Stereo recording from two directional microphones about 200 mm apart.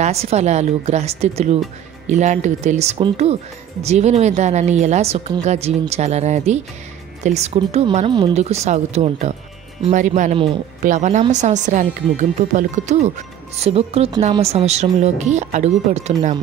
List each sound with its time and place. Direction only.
0.0 s speech: 30° right (ahead or behind)